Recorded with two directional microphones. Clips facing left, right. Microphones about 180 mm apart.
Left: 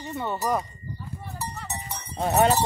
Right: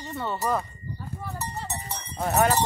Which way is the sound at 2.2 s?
25° left (ahead or behind).